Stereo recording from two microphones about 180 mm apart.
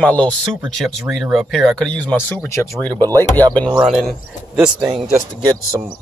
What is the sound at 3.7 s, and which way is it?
Speech, centre (ahead or behind).